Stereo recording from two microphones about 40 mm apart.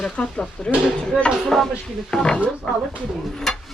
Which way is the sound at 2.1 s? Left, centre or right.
Left.